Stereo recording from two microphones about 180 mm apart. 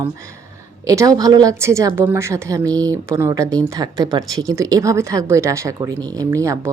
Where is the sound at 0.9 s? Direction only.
20° right (ahead or behind).